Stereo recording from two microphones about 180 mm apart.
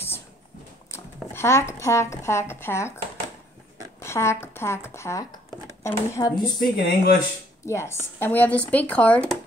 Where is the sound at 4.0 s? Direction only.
15° left (ahead or behind).